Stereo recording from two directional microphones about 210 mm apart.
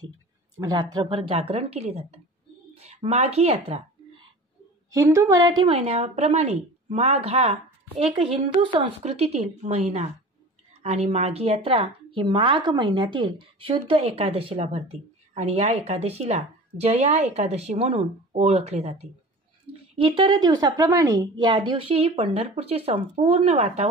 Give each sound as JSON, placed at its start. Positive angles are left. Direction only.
{"t": 0.6, "sound": "a woman's voice", "side_deg": -20}
{"t": 4.9, "sound": "a woman's voice", "side_deg": -15}